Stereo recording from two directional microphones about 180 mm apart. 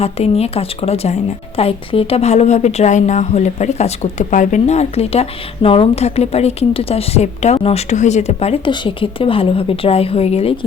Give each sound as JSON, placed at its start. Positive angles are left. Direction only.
{"t": 0.0, "sound": "a woman's voice", "side_deg": 35}